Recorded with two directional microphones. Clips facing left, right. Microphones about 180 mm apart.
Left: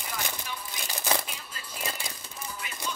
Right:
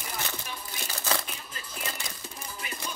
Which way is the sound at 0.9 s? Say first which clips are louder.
Left 2 dB; 15° left (ahead or behind).